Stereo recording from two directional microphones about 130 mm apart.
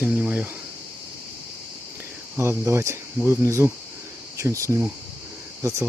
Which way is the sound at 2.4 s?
20° right (ahead or behind).